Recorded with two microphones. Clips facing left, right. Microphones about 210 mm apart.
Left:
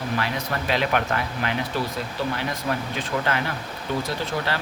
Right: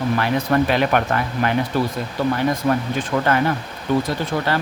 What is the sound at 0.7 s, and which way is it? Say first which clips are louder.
Speech: right 5 dB; 50° right (ahead or behind).